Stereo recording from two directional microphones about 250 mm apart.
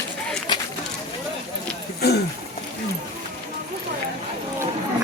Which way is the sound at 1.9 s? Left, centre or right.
Left.